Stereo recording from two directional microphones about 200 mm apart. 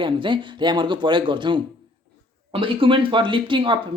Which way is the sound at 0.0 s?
25° right (ahead or behind).